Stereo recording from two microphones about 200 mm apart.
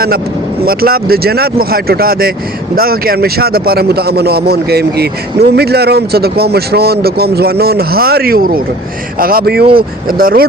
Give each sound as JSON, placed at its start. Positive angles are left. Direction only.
{"t": 0.6, "sound": "speech", "side_deg": -50}